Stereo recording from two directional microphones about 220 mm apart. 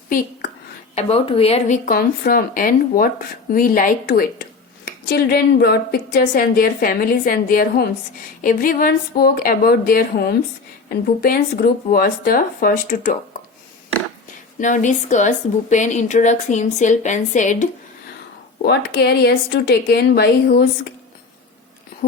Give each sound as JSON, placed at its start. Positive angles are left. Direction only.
{"t": 0.9, "sound": "a woman's voice", "side_deg": 25}
{"t": 14.6, "sound": "a woman's voice", "side_deg": 35}
{"t": 18.6, "sound": "a woman's voice", "side_deg": 50}